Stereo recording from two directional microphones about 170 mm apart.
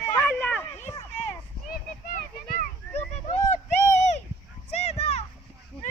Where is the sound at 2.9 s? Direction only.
40° left (ahead or behind).